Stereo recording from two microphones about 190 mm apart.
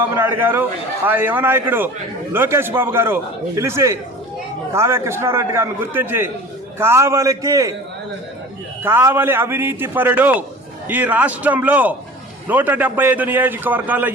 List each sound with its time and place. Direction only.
0.2 s a man's voice: 10° right (ahead or behind)
8.8 s a man's voice: 10° right (ahead or behind)